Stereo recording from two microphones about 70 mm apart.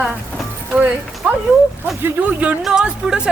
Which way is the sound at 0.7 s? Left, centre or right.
Centre.